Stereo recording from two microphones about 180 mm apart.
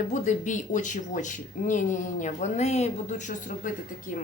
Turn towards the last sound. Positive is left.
turn(degrees=45)  # may be behind; listen again after turning